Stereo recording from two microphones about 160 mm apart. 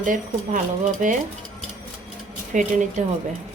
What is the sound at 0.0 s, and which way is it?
Speech, 55° right (ahead or behind).